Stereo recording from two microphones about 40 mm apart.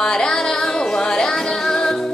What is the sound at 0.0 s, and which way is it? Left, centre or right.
Music, centre.